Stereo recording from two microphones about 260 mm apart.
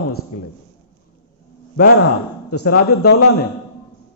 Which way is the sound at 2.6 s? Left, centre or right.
Left.